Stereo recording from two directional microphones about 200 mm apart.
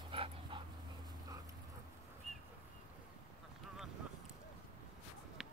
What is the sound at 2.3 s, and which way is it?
Bird, centre (ahead or behind).